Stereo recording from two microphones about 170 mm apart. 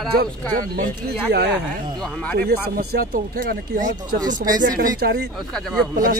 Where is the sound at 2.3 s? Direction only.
65° right (ahead or behind).